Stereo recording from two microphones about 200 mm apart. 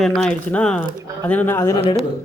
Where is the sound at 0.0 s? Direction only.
Centre (ahead or behind).